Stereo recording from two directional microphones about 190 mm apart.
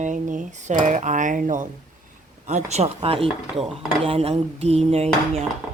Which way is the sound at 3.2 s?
Centre (ahead or behind).